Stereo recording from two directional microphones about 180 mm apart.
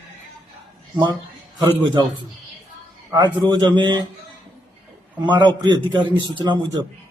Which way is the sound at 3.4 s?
25° right (ahead or behind).